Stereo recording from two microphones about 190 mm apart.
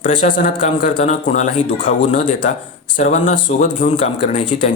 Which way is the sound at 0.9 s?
35° left (ahead or behind).